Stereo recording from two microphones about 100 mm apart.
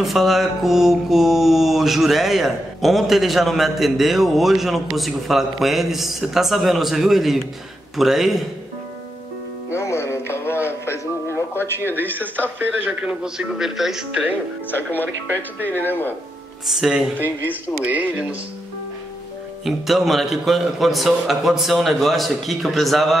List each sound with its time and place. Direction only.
0.0 s mantra: centre (ahead or behind)
9.7 s speech: 30° left (ahead or behind)
12.4 s mantra: 20° right (ahead or behind)
14.7 s speech: 20° left (ahead or behind)
16.6 s mantra: 5° right (ahead or behind)
17.5 s a man's voice: 15° right (ahead or behind)
19.6 s mantra: centre (ahead or behind)